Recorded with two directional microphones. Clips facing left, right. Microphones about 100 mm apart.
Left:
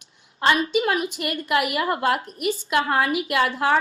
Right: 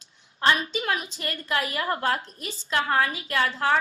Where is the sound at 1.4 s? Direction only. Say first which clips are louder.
Left 5 dB; 15° left (ahead or behind).